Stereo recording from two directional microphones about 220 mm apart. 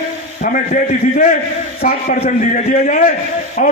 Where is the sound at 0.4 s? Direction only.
40° left (ahead or behind).